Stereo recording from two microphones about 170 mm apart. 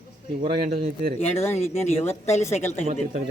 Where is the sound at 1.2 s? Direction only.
15° left (ahead or behind).